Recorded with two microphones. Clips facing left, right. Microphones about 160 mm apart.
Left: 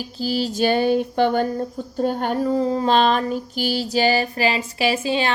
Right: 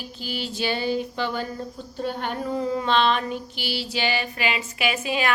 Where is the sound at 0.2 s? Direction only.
35° left (ahead or behind); by 1.5 s 55° left (ahead or behind).